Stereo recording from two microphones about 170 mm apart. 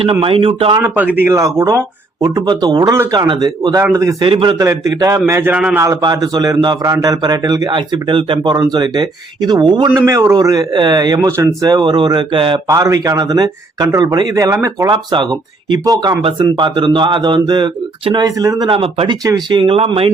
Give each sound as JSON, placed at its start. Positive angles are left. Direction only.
{"t": 0.0, "sound": "speech", "side_deg": -30}
{"t": 0.8, "sound": "a man's voice", "side_deg": -10}
{"t": 4.3, "sound": "speech", "side_deg": -30}
{"t": 4.5, "sound": "a man's voice", "side_deg": -15}
{"t": 5.8, "sound": "speech", "side_deg": -20}